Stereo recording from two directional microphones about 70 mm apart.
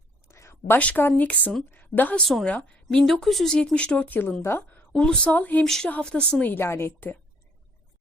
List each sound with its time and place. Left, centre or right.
0.3 s a sound: left
0.8 s a woman's voice: left
3.1 s speech: centre
4.4 s a woman's voice: left
4.9 s speech: centre
5.3 s speech: left
5.6 s speech: centre
6.4 s a woman's voice: left